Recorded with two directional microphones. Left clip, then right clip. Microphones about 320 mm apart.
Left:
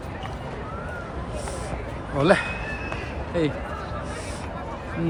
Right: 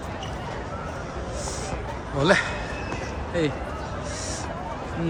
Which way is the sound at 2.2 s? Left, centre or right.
Centre.